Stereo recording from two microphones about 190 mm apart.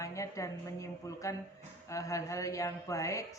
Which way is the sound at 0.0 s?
15° left (ahead or behind).